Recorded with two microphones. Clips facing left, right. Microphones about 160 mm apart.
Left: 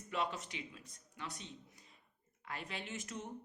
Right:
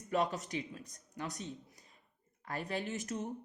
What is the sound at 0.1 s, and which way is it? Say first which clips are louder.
Speech: right 6 dB; 40° right (ahead or behind).